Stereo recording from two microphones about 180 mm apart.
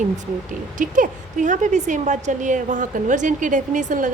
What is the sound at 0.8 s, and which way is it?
A woman's voice, 45° right (ahead or behind).